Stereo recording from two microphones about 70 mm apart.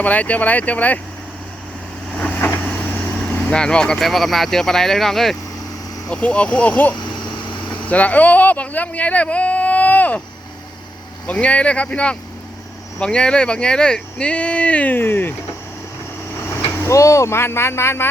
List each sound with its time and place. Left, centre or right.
0.0 s speech: left
2.1 s vehicle: centre
3.5 s speech: centre
6.1 s speech: centre
11.3 s speech: centre
16.8 s speech: left